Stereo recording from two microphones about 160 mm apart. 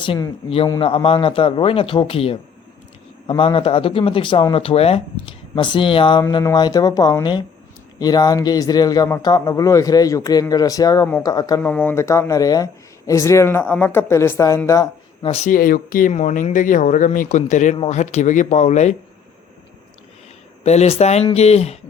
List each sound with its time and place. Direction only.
0.0 s speech: 35° left (ahead or behind)
11.6 s speech: 10° left (ahead or behind)
15.2 s speech: 40° left (ahead or behind)
15.4 s speech: 60° left (ahead or behind)
20.7 s speech: 40° left (ahead or behind)